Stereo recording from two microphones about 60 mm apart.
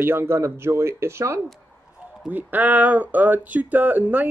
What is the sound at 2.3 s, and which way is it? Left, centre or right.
Speech, right.